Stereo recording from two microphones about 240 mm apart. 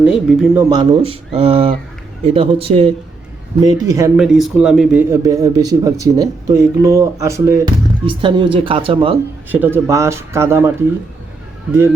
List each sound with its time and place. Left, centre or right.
0.0 s speech: centre
4.2 s speech: centre; by 9.1 s right
9.5 s speech: centre